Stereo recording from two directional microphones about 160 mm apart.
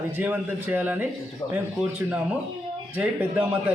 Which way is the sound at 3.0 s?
10° right (ahead or behind).